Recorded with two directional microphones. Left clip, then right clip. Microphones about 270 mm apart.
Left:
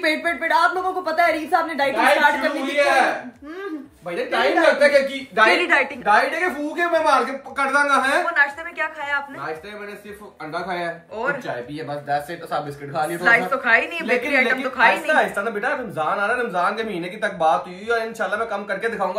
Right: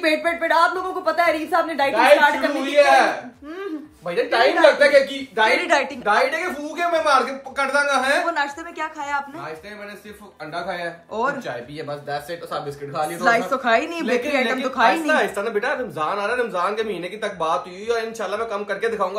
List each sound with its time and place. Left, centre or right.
0.0 s a woman's voice: centre
4.1 s a woman's voice: right
5.6 s a woman's voice: centre
10.5 s a woman's voice: centre